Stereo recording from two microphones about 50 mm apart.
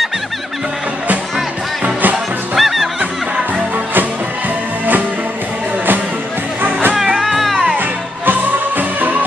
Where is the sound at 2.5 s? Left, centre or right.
Centre.